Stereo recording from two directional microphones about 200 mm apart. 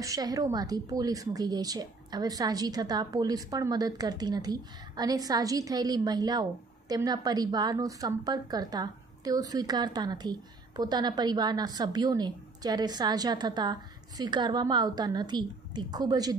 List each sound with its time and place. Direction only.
0.0 s a woman's voice: 15° right (ahead or behind)